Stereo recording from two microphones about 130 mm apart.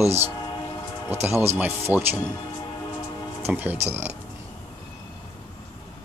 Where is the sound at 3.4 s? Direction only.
15° right (ahead or behind).